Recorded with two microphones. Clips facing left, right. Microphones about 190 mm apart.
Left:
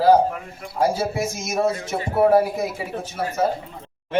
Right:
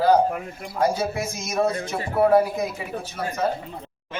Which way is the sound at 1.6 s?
25° left (ahead or behind).